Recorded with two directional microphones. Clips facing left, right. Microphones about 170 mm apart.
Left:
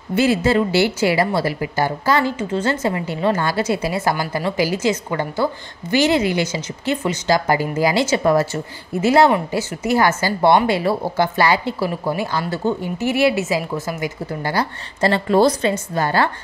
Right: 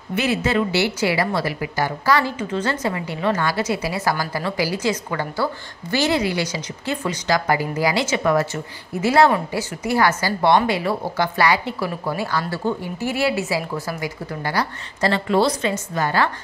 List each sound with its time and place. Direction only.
0.1 s speech: 30° left (ahead or behind)
15.7 s a woman's voice: 30° left (ahead or behind)